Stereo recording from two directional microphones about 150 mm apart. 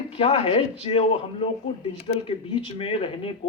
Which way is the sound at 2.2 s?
35° left (ahead or behind).